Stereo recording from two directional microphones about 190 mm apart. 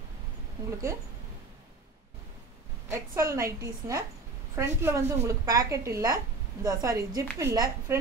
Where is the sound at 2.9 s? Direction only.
15° right (ahead or behind).